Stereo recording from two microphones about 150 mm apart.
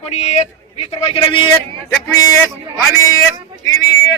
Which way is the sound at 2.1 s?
25° left (ahead or behind).